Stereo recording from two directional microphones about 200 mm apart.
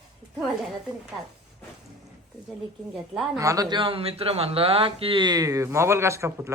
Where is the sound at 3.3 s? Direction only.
15° right (ahead or behind).